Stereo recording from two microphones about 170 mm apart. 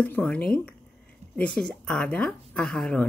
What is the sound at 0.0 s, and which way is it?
A woman's voice, 10° left (ahead or behind).